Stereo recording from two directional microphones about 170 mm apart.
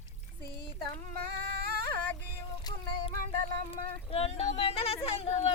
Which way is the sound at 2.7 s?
25° left (ahead or behind).